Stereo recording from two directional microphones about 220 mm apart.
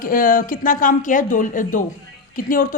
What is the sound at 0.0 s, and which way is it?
A woman's voice, 40° left (ahead or behind).